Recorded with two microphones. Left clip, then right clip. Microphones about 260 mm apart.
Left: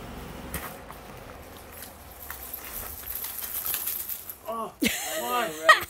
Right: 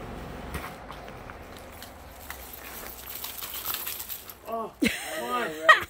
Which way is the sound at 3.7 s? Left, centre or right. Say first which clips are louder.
Left 2 dB; centre.